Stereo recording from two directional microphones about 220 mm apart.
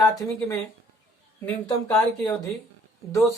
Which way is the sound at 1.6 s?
15° left (ahead or behind).